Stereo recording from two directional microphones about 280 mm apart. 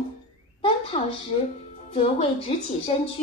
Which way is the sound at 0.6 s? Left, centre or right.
Left.